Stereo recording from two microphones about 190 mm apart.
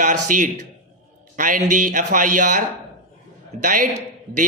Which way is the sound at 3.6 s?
45° right (ahead or behind).